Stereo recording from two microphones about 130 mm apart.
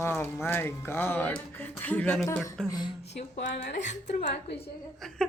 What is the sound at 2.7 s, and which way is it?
Speech, 35° left (ahead or behind).